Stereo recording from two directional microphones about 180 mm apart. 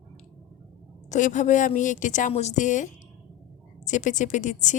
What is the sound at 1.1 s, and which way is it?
A woman's voice, 45° left (ahead or behind).